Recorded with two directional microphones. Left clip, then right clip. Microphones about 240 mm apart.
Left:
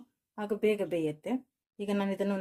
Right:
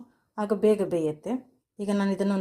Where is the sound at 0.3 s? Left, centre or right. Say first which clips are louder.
Right 6 dB; centre.